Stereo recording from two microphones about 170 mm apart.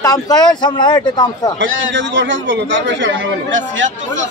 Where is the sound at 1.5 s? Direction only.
90° right.